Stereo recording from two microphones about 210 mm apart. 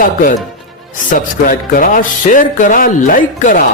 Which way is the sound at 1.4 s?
40° left (ahead or behind).